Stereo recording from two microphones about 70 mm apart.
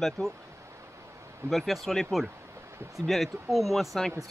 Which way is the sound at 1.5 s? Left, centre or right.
Centre.